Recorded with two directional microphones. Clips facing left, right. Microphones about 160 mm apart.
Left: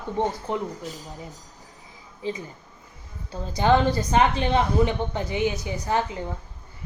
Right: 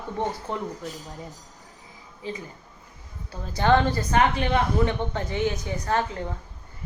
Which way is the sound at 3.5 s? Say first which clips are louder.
Left 1 dB; 15° left (ahead or behind).